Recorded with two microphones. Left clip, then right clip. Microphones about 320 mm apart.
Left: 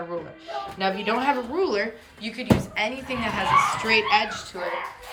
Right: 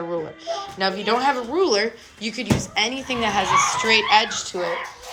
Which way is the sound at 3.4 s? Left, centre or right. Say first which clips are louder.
Left 1 dB; centre.